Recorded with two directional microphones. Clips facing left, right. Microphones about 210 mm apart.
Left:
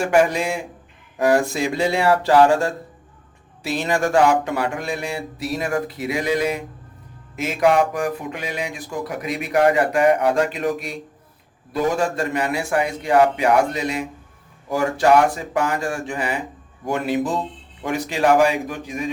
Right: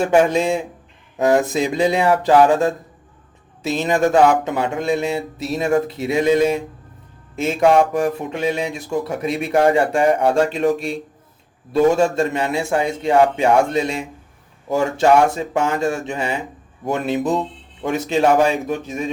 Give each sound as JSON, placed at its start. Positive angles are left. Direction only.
{"t": 0.0, "sound": "speech", "side_deg": -25}